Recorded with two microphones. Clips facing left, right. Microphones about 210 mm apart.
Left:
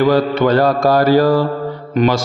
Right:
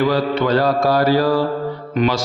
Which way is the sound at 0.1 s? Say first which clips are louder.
Left 4 dB; 50° left (ahead or behind).